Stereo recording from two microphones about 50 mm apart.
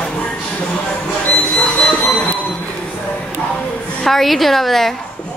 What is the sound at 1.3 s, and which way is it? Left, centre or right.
Train, left.